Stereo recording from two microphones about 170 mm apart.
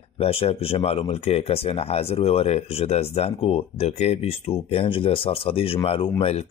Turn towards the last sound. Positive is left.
turn(degrees=35)  # may be behind; listen again after turning